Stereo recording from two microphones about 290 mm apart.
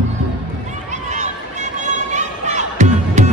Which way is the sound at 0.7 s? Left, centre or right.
Right.